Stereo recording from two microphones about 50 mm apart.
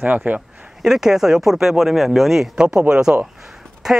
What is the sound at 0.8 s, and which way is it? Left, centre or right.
Speech, centre.